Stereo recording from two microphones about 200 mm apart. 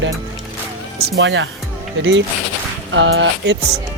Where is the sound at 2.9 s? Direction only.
70° right (ahead or behind).